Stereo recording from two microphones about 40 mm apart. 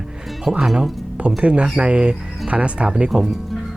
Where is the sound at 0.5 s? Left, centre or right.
Centre.